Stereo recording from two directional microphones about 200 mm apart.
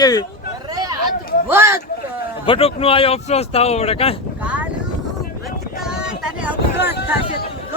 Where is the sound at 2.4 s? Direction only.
25° left (ahead or behind).